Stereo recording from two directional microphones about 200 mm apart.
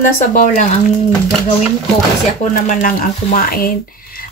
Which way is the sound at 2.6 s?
40° left (ahead or behind).